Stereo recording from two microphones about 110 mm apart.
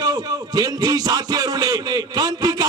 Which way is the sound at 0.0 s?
35° right (ahead or behind).